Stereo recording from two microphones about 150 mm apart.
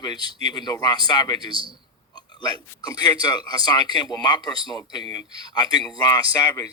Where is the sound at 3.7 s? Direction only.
30° left (ahead or behind).